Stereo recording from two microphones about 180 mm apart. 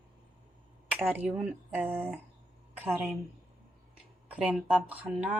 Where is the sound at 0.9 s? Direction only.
10° right (ahead or behind).